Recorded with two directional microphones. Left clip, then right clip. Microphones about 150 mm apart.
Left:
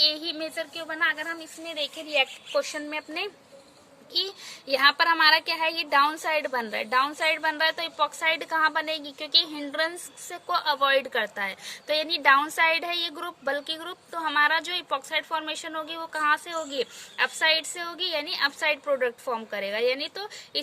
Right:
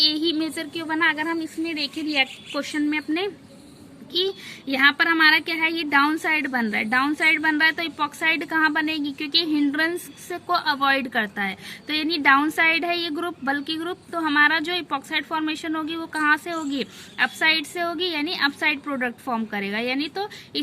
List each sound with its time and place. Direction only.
0.0 s a child's voice: 40° left (ahead or behind)